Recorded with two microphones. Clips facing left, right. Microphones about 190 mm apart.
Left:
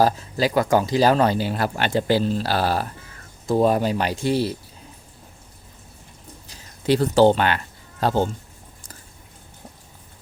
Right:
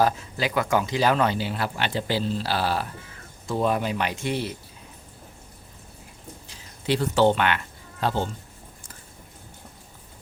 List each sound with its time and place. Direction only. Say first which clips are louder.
0.0 s speech: left 4 dB; 35° left (ahead or behind)
6.5 s speech: left 5 dB; 40° left (ahead or behind)